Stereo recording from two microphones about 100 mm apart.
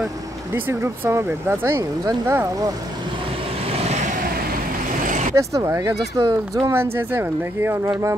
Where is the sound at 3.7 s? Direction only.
90° right.